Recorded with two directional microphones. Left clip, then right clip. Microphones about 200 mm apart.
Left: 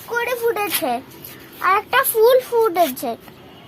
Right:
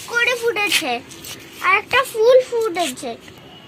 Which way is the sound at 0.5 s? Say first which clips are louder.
Right 2 dB; 55° left (ahead or behind).